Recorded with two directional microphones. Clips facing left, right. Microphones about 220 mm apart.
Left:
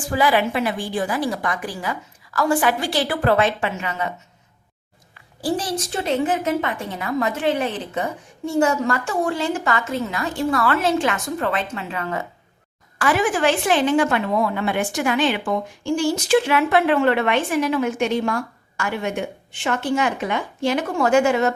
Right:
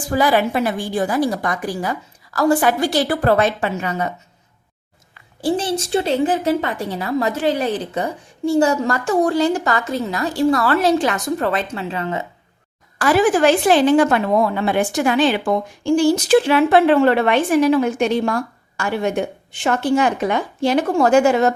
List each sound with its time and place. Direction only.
0.1 s a woman's voice: 40° right (ahead or behind)
5.4 s a woman's voice: 25° right (ahead or behind)
13.0 s a woman's voice: 35° right (ahead or behind)